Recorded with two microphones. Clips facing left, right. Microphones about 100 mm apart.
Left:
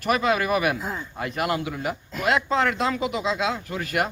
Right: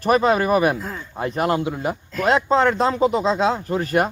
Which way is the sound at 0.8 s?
10° left (ahead or behind).